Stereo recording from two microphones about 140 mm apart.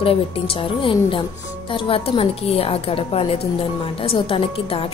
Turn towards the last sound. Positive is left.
turn(degrees=40)  # may be behind; listen again after turning